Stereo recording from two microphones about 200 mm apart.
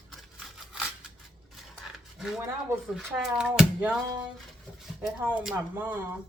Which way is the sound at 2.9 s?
5° right (ahead or behind).